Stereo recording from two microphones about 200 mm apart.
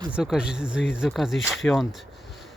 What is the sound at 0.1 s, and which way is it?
Speech, 5° right (ahead or behind).